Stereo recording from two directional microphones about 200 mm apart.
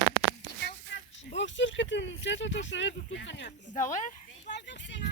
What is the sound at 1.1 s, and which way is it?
Speech, 65° left (ahead or behind).